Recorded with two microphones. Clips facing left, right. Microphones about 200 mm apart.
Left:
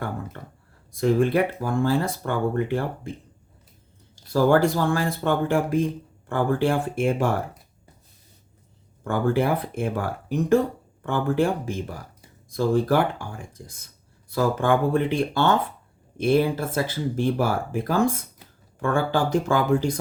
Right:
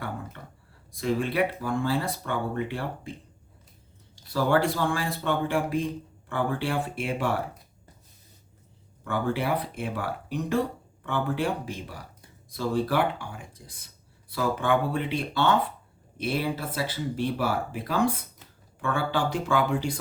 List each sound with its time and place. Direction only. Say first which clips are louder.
0.4 s a sound: left 5 dB; 45° left (ahead or behind)
1.0 s speech: left 6 dB; 45° left (ahead or behind)
4.3 s speech: left 5 dB; 45° left (ahead or behind)
9.0 s speech: left 5 dB; 45° left (ahead or behind)